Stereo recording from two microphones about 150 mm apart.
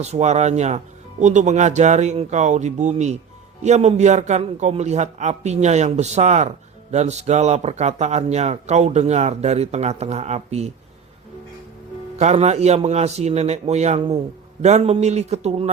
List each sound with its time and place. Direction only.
0.0 s speech: 50° right (ahead or behind)
12.1 s speech: 45° right (ahead or behind)